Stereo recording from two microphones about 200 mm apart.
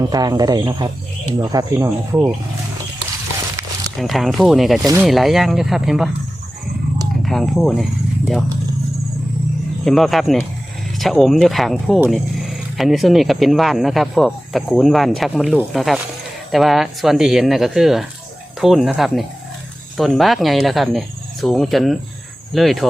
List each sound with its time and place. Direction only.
0.1 s speech: 20° right (ahead or behind)
3.9 s speech: centre (ahead or behind)
4.8 s speech: 15° right (ahead or behind)
5.0 s speech: centre (ahead or behind)
7.2 s speech: centre (ahead or behind)
9.8 s speech: centre (ahead or behind)